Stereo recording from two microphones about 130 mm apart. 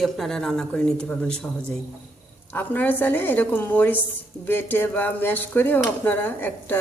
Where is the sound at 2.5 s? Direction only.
15° left (ahead or behind).